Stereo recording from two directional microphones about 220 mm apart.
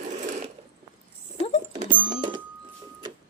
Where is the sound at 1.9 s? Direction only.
25° right (ahead or behind).